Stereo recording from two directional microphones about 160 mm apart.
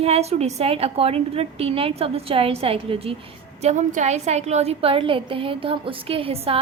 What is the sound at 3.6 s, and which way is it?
A woman's voice, 45° right (ahead or behind).